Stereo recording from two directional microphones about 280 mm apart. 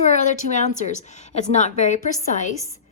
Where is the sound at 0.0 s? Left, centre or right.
Left.